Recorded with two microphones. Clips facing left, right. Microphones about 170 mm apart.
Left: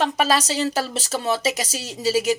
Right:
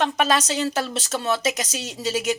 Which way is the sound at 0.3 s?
35° left (ahead or behind).